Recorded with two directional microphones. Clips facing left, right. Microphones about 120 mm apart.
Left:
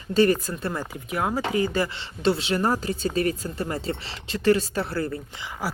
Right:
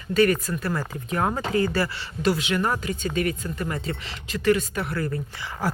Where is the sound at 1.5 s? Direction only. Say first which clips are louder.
Right 1 dB; 15° left (ahead or behind).